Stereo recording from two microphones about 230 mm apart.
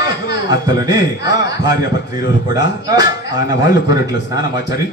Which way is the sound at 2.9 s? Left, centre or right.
Centre.